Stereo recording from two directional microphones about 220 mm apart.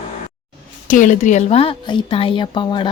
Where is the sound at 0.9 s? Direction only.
35° left (ahead or behind).